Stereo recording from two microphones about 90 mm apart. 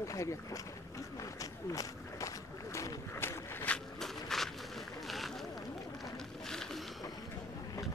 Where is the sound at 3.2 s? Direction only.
25° left (ahead or behind).